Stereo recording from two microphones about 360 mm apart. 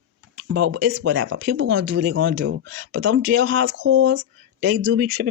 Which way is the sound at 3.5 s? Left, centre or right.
Right.